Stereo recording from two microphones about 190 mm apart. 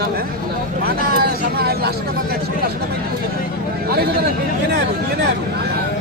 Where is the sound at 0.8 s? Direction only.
50° right (ahead or behind).